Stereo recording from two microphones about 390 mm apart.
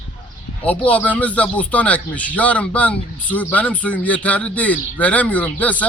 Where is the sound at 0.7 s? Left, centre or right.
Centre.